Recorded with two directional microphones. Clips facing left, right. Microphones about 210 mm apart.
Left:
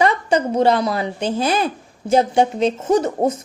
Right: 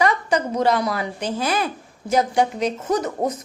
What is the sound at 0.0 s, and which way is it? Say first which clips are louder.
A woman's voice: left 3 dB; 25° left (ahead or behind).